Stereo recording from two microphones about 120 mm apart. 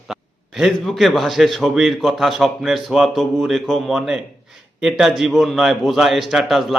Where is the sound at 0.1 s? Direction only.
Centre (ahead or behind).